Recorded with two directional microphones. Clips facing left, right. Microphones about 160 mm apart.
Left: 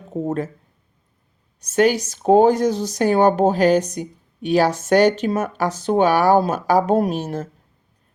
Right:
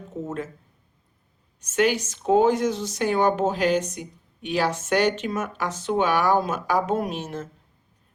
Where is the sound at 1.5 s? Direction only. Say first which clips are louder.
Left 5 dB; 40° left (ahead or behind).